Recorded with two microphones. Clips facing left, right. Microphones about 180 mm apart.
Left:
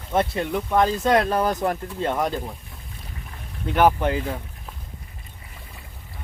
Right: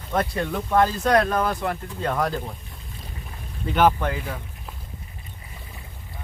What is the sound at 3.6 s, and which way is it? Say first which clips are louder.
Speech: left 1 dB; centre (ahead or behind).